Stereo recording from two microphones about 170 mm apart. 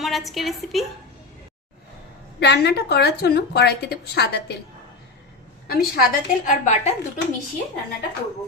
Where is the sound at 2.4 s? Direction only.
80° left.